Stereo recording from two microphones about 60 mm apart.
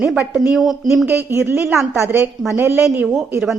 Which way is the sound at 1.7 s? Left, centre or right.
Right.